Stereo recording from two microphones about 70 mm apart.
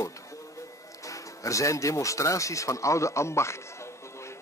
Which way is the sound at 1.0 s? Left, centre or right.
Left.